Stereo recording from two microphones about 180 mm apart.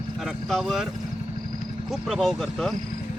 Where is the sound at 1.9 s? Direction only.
Centre (ahead or behind).